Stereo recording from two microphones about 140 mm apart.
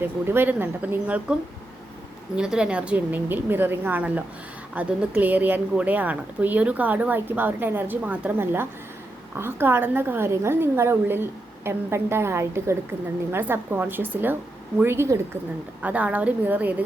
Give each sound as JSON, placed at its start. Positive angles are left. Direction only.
{"t": 0.0, "sound": "a woman's voice", "side_deg": -15}